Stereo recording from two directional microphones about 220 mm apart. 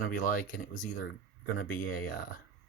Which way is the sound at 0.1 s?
40° left (ahead or behind).